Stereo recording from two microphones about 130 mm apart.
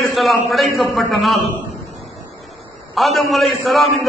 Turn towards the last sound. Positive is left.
turn(degrees=0)  # may be behind; listen again after turning